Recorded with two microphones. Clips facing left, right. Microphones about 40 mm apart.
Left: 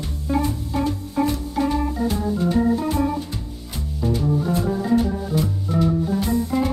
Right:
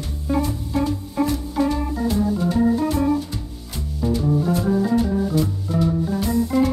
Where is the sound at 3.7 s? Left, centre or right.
Centre.